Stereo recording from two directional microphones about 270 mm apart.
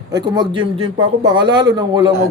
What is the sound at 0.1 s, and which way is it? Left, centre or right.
A man's voice, centre.